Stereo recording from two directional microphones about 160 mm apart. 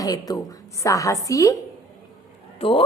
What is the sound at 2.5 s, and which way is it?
Speech, 35° left (ahead or behind).